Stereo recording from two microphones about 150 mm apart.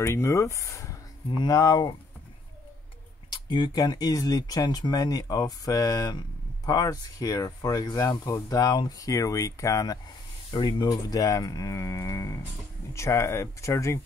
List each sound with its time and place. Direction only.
0.0 s speech: 20° left (ahead or behind)
3.3 s speech: 30° left (ahead or behind)